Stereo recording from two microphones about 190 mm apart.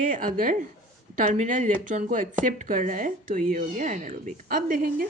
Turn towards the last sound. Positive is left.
turn(degrees=-50)  # may be behind; listen again after turning